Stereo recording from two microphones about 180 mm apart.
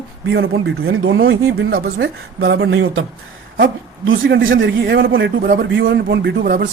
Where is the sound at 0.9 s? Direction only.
90° right.